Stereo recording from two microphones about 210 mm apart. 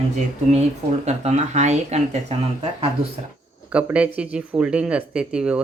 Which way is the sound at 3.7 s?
5° right (ahead or behind).